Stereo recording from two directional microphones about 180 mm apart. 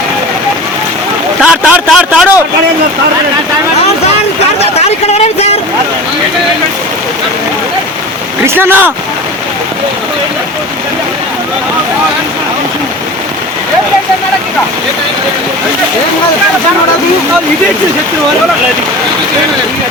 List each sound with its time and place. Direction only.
1.4 s a sound: 5° right (ahead or behind)
5.1 s vehicle: 35° left (ahead or behind)
8.4 s speech: 10° right (ahead or behind)